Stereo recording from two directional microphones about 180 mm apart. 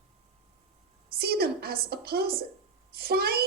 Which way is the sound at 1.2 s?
60° right (ahead or behind).